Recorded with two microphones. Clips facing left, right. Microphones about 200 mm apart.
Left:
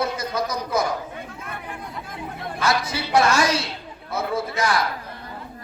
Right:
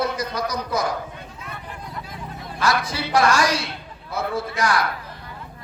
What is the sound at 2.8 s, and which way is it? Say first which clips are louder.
Speech: even; 25° left (ahead or behind).